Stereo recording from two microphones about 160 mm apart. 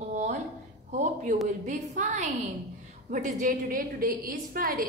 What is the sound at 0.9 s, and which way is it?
A woman's voice, 50° right (ahead or behind).